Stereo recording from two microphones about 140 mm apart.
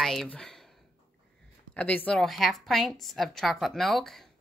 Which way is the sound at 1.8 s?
10° left (ahead or behind).